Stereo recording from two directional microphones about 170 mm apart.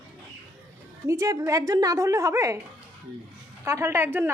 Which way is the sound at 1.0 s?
15° right (ahead or behind).